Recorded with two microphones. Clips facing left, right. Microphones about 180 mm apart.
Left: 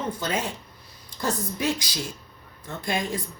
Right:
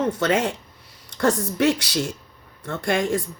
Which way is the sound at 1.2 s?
90° right.